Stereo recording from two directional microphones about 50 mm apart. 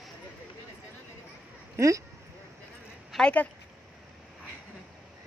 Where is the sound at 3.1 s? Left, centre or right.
Centre.